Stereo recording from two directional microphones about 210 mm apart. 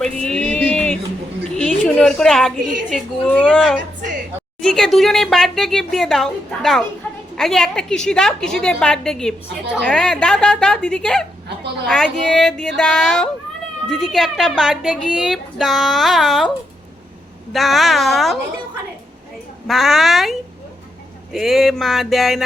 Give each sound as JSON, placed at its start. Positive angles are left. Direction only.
{"t": 0.0, "sound": "a sound", "side_deg": 5}
{"t": 2.9, "sound": "a woman's voice", "side_deg": 5}
{"t": 11.4, "sound": "speech", "side_deg": -55}
{"t": 11.9, "sound": "a woman's voice", "side_deg": 5}
{"t": 17.5, "sound": "a woman's voice", "side_deg": 0}
{"t": 19.6, "sound": "a woman's voice", "side_deg": 0}
{"t": 21.3, "sound": "a woman's voice", "side_deg": 0}